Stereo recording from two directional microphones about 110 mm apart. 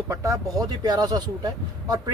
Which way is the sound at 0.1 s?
30° right (ahead or behind).